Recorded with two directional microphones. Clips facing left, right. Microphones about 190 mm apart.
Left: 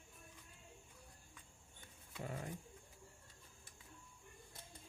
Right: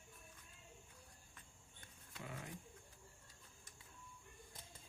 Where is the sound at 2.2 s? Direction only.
40° left (ahead or behind).